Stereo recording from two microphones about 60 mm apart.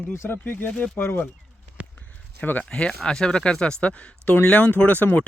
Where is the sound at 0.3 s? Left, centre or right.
Left.